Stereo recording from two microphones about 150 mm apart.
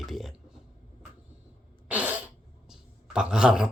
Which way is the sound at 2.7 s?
5° right (ahead or behind).